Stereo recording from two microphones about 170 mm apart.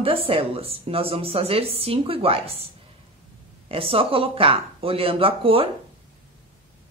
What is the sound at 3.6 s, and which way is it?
A woman's voice, 35° right (ahead or behind).